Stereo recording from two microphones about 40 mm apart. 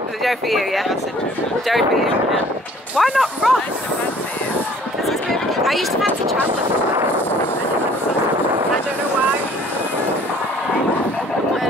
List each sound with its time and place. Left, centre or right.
0.2 s speech: centre
3.0 s speech: centre
5.6 s a sound: centre